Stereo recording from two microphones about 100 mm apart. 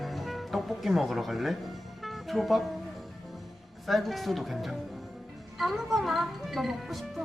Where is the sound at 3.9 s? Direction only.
Centre (ahead or behind).